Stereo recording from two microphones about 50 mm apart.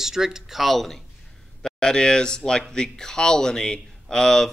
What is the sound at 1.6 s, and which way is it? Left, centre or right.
Speech, centre.